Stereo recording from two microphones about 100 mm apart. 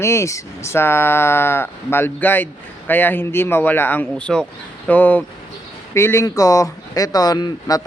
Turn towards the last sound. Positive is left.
turn(degrees=40)  # may be behind; listen again after turning